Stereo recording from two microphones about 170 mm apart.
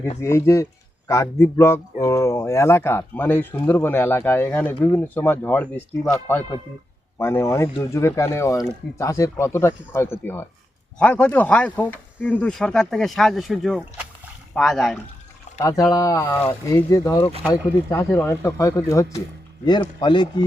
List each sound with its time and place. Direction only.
0.2 s a man's voice: 15° left (ahead or behind)
15.6 s a man's voice: 20° left (ahead or behind)
19.6 s speech: 25° left (ahead or behind)